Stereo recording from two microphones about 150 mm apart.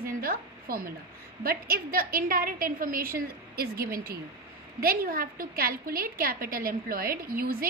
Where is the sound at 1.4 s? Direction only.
80° right.